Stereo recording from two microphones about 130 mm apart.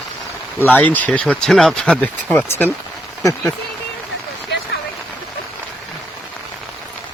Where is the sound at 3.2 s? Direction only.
25° left (ahead or behind).